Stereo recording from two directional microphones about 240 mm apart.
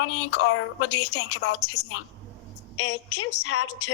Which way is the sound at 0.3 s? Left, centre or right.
Left.